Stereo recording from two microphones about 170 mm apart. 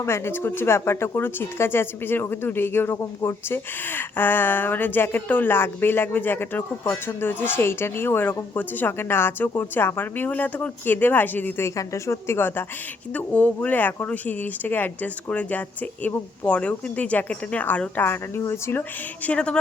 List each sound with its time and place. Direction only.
0.0 s speech: 15° left (ahead or behind)